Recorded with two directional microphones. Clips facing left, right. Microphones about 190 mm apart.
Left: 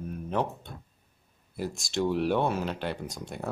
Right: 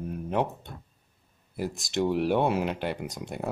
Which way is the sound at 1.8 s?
15° right (ahead or behind).